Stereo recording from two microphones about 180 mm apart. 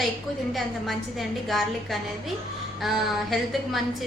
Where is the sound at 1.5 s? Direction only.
Centre (ahead or behind).